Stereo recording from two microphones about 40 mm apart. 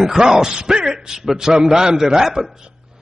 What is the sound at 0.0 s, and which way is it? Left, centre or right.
A man's voice, centre.